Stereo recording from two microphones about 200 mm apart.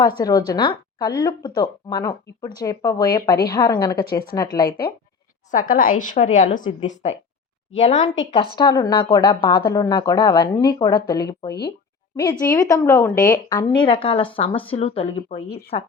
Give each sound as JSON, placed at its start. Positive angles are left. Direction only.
{"t": 0.2, "sound": "speech", "side_deg": 20}
{"t": 5.5, "sound": "a woman's voice", "side_deg": 40}
{"t": 8.5, "sound": "speech", "side_deg": 20}